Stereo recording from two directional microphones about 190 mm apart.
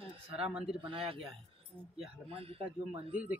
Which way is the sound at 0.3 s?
5° right (ahead or behind).